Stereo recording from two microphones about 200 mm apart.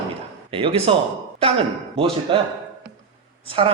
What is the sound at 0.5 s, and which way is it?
A man's voice, 25° right (ahead or behind).